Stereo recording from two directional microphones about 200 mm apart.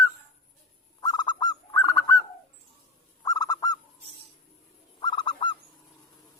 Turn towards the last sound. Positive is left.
turn(degrees=25)  # may be behind; listen again after turning